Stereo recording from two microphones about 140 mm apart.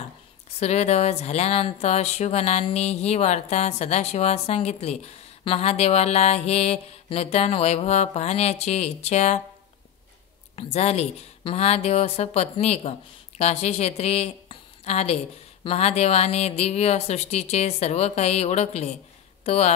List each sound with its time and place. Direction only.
0.6 s speech: 50° left (ahead or behind)
10.5 s a woman's voice: 50° left (ahead or behind)